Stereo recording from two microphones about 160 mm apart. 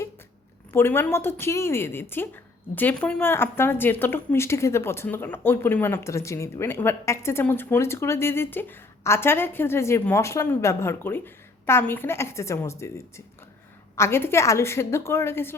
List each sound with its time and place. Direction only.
0.7 s a woman's voice: 15° left (ahead or behind)